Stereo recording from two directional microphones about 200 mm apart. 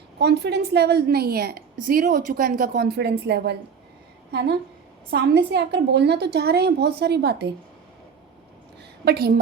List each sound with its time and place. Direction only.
0.2 s a woman's voice: 55° right (ahead or behind)
9.0 s a woman's voice: 50° right (ahead or behind)